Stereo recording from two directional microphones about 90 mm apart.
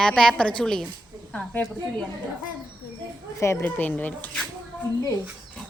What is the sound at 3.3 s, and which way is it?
Speech, 35° left (ahead or behind).